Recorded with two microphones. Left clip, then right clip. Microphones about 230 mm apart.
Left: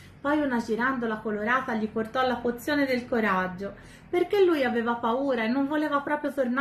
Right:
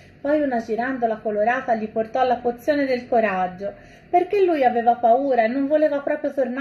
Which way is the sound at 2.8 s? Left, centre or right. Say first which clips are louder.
Right 6 dB; centre.